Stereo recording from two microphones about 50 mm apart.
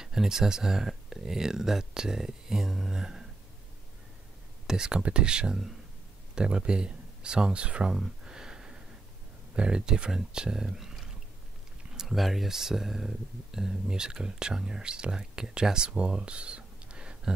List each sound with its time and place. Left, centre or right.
0.0 s speech: centre
4.6 s speech: centre
7.9 s a sound: centre
9.6 s speech: centre